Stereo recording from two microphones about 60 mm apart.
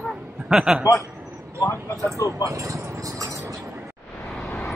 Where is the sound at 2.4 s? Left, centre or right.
Right.